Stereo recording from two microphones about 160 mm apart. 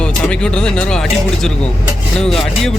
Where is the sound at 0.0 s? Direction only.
5° left (ahead or behind).